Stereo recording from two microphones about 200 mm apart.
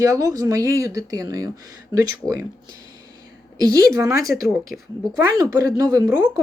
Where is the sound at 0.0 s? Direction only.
15° right (ahead or behind).